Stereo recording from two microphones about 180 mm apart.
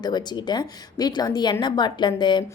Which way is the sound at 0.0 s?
25° left (ahead or behind).